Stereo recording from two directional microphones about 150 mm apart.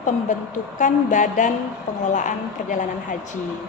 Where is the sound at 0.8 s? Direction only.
60° left (ahead or behind).